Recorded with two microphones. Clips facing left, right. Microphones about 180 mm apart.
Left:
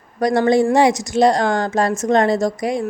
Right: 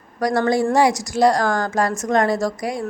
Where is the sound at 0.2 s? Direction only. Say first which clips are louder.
Left 4 dB; 25° left (ahead or behind).